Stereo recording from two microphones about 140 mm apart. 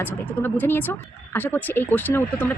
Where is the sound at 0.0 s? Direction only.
15° left (ahead or behind).